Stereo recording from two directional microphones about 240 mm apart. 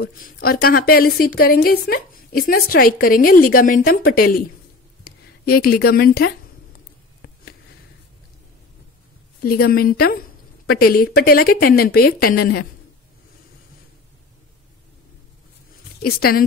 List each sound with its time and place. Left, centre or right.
0.0 s a woman's voice: left
5.4 s a sound: left
9.4 s a woman's voice: left
16.0 s a woman's voice: left